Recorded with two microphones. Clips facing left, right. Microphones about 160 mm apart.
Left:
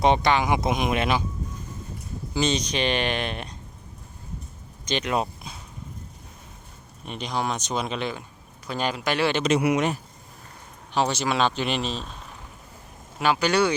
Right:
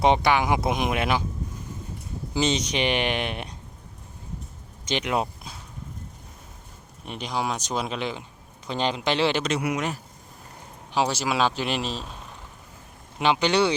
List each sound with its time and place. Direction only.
0.0 s speech: 10° right (ahead or behind)
2.3 s speech: 20° right (ahead or behind)
4.9 s speech: 15° right (ahead or behind)
7.0 s speech: 15° right (ahead or behind)
9.5 s speech: 25° left (ahead or behind)
10.9 s speech: 10° right (ahead or behind)
13.1 s speech: 20° right (ahead or behind)